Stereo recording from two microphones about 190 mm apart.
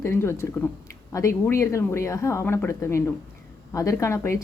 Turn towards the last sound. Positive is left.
turn(degrees=15)  # may be behind; listen again after turning